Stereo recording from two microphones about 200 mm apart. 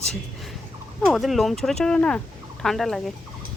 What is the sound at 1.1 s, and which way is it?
Speech, centre (ahead or behind).